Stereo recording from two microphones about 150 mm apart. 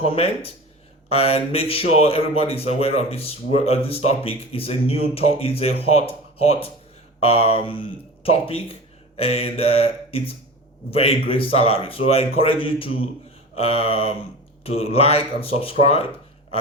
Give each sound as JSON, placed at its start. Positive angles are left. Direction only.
{"t": 0.0, "sound": "speech", "side_deg": 40}